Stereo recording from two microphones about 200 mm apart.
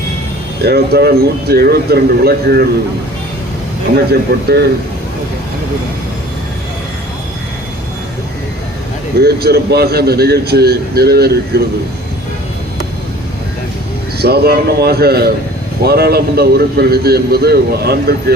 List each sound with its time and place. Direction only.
0.6 s a man's voice: 55° right (ahead or behind)
4.1 s a man's voice: 55° right (ahead or behind)
9.1 s a man's voice: 55° right (ahead or behind)
14.2 s a man's voice: 50° right (ahead or behind)